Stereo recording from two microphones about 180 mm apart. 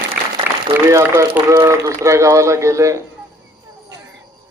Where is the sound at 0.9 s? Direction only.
15° right (ahead or behind).